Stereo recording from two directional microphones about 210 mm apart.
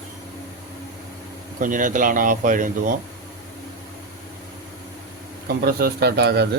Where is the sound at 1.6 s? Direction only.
40° right (ahead or behind).